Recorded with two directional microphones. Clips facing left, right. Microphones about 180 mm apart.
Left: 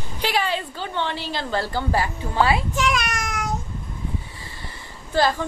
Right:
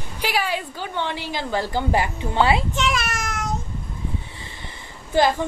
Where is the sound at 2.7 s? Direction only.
Centre (ahead or behind).